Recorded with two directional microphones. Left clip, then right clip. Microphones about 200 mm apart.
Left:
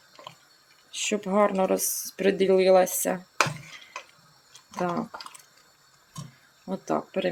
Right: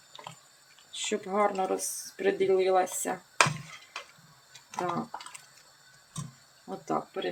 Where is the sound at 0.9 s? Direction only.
30° left (ahead or behind).